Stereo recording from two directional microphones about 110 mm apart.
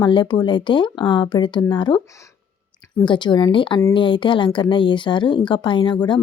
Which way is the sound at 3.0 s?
45° left (ahead or behind).